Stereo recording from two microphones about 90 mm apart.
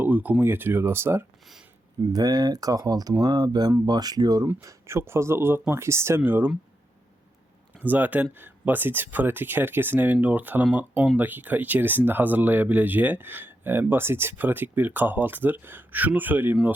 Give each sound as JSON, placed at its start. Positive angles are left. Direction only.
{"t": 0.0, "sound": "speech", "side_deg": -20}
{"t": 2.1, "sound": "speech", "side_deg": -45}
{"t": 4.6, "sound": "speech", "side_deg": -30}
{"t": 7.8, "sound": "speech", "side_deg": -20}